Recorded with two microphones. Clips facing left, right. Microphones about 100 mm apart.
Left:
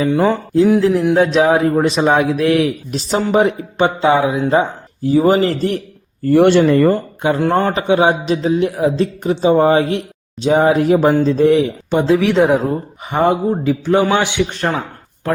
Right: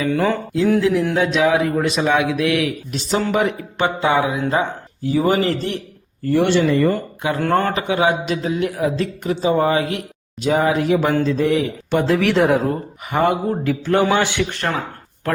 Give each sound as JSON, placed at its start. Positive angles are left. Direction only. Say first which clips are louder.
{"t": 0.0, "sound": "speech", "louder": "left 4 dB", "side_deg": 20}
{"t": 0.8, "sound": "a man's voice", "louder": "left 4 dB", "side_deg": 35}
{"t": 6.2, "sound": "speech", "louder": "left 6 dB", "side_deg": 50}
{"t": 6.9, "sound": "a man's voice", "louder": "left 5 dB", "side_deg": 30}
{"t": 11.9, "sound": "a man's voice", "louder": "left 2 dB", "side_deg": 15}